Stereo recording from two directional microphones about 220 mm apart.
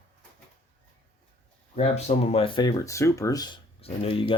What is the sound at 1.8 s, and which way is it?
Speech, 30° left (ahead or behind).